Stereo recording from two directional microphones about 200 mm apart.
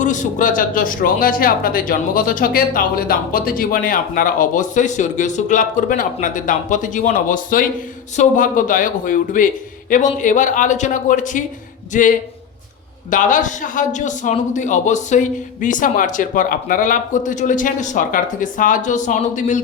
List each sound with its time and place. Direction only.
0.0 s a man's voice: 40° left (ahead or behind)